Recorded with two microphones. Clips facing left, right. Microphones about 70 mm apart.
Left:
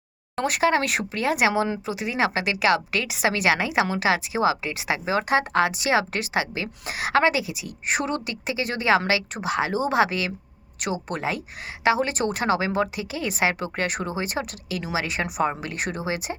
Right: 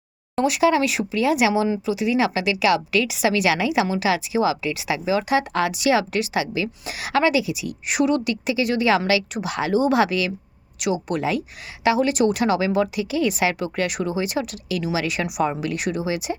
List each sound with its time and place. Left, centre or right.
0.3 s speech: left